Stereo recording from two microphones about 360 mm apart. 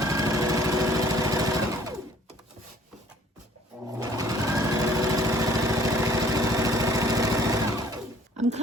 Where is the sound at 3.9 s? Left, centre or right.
Centre.